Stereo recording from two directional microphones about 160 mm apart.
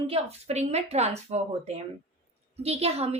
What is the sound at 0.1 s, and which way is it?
Speech, 40° right (ahead or behind).